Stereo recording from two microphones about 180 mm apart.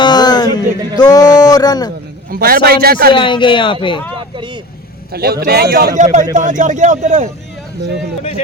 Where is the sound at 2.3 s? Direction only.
55° right (ahead or behind).